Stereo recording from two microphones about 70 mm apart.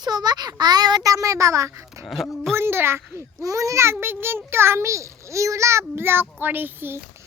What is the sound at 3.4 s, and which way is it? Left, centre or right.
A child's voice, right.